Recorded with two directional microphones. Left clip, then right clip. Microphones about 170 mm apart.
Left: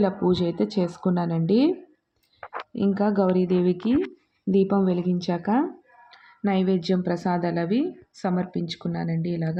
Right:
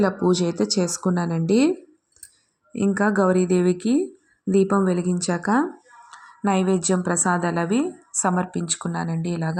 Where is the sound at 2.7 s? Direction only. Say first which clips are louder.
Right 3 dB; 15° right (ahead or behind).